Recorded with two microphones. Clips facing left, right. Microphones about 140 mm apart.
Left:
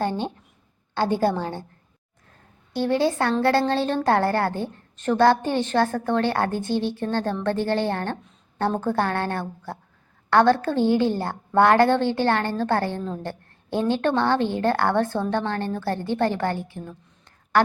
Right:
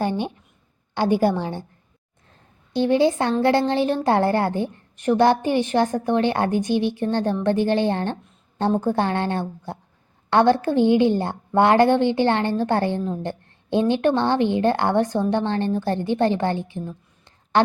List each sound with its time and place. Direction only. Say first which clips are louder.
0.0 s a woman's voice: right 2 dB; 15° right (ahead or behind)
2.7 s a woman's voice: right 3 dB; 20° right (ahead or behind)